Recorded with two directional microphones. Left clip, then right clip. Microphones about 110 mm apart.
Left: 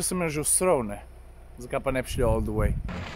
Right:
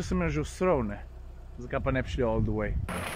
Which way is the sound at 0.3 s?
45° left (ahead or behind).